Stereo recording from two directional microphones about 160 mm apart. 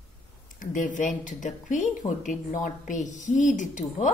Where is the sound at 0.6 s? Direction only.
55° left (ahead or behind).